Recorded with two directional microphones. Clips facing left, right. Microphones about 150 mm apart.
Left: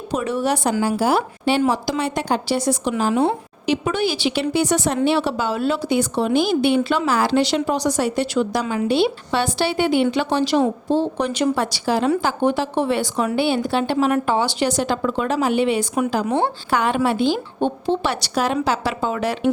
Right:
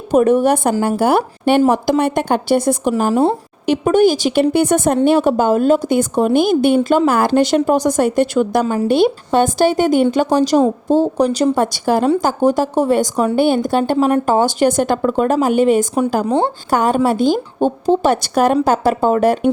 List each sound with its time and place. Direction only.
0.1 s speech: 50° right (ahead or behind)